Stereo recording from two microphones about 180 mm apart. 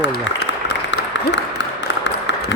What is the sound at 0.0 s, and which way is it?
Applause, 80° left.